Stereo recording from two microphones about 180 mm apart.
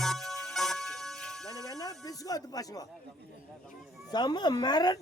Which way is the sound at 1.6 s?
20° left (ahead or behind).